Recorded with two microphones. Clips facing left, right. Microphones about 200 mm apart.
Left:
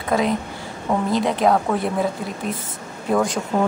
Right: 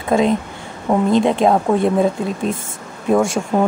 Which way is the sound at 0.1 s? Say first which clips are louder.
Right 5 dB; 25° right (ahead or behind).